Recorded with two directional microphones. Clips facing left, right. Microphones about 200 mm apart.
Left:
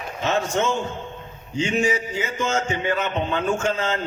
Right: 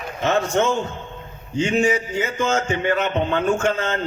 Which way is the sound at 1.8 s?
60° right (ahead or behind).